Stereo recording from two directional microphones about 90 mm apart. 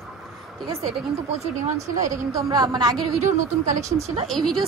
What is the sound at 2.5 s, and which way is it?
Speech, 45° right (ahead or behind).